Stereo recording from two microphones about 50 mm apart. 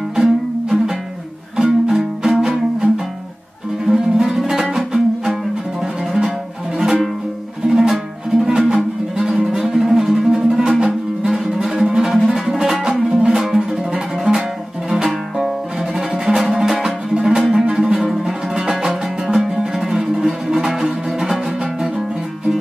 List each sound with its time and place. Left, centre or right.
0.1 s music: centre
7.6 s music: centre